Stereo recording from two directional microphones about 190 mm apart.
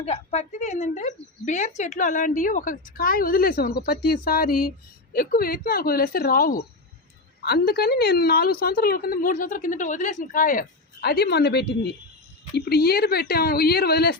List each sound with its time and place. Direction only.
0.0 s a woman's voice: 35° left (ahead or behind); by 14.2 s 55° left (ahead or behind)